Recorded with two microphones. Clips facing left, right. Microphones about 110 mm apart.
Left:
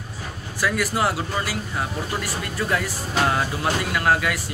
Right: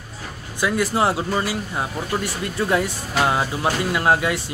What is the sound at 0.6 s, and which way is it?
Speech, 20° right (ahead or behind).